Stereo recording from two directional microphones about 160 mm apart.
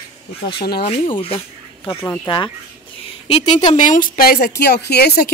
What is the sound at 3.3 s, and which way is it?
Speech, 40° left (ahead or behind).